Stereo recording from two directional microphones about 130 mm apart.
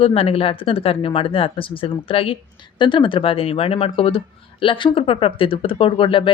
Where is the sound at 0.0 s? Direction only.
45° left (ahead or behind).